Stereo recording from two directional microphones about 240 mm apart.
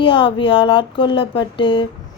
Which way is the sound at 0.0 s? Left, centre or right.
Left.